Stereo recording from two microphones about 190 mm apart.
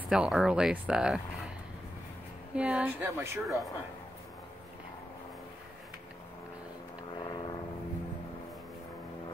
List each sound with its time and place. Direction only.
0.1 s speech: 5° right (ahead or behind)
2.5 s speech: 5° right (ahead or behind)
3.4 s speech: centre (ahead or behind)
7.2 s vehicle: 25° left (ahead or behind)